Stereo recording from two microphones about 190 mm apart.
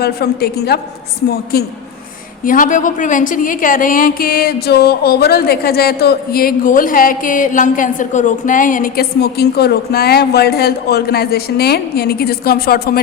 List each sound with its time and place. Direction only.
0.0 s a woman's voice: 55° left (ahead or behind)